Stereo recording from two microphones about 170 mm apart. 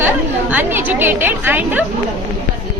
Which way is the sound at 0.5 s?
10° right (ahead or behind).